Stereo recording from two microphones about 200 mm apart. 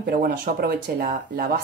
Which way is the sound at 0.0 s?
50° right (ahead or behind).